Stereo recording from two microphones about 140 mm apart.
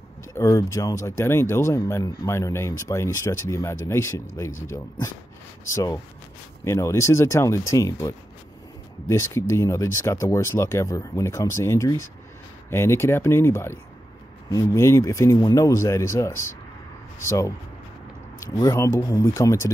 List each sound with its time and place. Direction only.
0.3 s speech: 20° left (ahead or behind)
6.6 s speech: 20° left (ahead or behind)
9.3 s speech: 20° left (ahead or behind)